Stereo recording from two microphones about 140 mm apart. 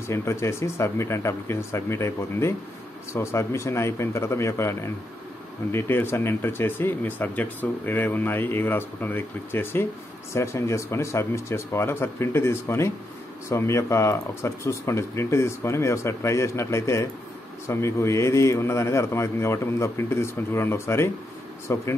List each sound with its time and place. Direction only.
0.1 s speech: 20° left (ahead or behind)